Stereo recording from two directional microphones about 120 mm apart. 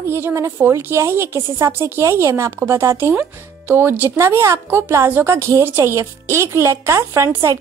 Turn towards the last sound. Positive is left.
turn(degrees=-25)  # may be behind; listen again after turning